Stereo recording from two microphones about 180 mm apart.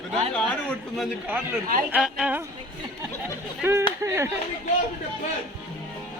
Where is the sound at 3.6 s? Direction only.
15° right (ahead or behind).